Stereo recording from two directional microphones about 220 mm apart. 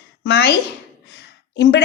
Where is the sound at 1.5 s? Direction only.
50° left (ahead or behind).